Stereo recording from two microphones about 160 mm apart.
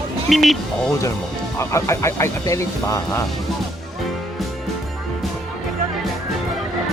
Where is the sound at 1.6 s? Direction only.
20° left (ahead or behind).